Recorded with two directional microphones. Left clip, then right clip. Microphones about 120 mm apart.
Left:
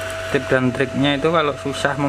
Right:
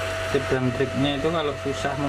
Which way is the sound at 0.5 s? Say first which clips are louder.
Left 5 dB; 40° left (ahead or behind).